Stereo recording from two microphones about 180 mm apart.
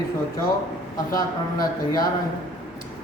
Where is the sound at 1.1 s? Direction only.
20° left (ahead or behind).